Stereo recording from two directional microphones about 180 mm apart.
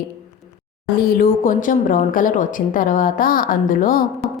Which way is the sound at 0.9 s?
55° left (ahead or behind).